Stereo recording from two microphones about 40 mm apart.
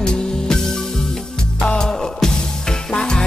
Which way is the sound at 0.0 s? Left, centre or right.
Centre.